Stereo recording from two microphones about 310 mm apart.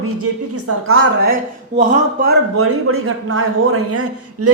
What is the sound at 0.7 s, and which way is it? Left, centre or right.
Speech, right.